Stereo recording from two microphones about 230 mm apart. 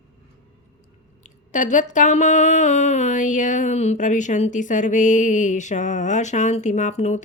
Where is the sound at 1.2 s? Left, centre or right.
Left.